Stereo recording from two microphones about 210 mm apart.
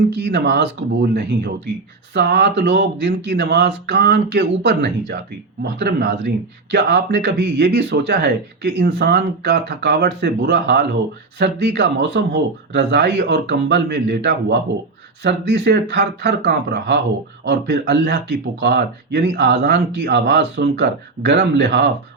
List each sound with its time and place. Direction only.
0.2 s a man's voice: 55° right (ahead or behind)